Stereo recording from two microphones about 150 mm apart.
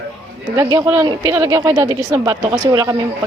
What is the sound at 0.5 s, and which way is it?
Speech, 20° right (ahead or behind).